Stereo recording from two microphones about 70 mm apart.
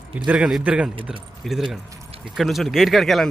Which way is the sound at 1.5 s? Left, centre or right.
Centre.